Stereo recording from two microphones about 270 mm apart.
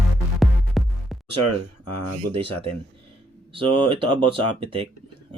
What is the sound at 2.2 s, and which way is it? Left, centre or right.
Speech, right.